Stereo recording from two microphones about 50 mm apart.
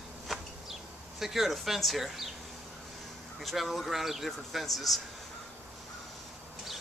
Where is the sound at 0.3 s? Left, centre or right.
Centre.